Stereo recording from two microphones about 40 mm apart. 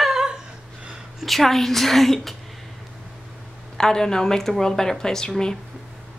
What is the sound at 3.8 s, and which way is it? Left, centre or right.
A woman's voice, centre.